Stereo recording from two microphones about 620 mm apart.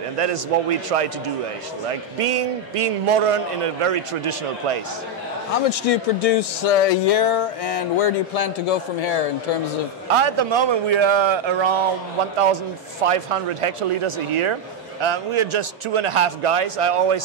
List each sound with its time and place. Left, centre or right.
0.2 s a man's voice: right
5.5 s speech: left
10.2 s a man's voice: right
13.0 s a man's voice: right